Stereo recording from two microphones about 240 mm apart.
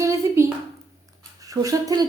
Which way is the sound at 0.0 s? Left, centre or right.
Centre.